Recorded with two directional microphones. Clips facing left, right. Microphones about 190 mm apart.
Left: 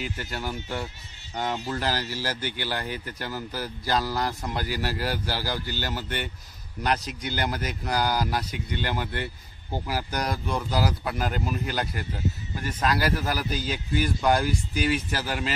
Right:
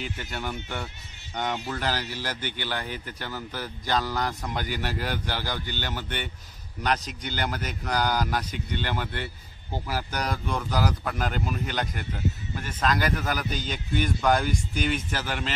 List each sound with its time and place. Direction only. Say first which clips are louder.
0.0 s speech: left 1 dB; 5° left (ahead or behind)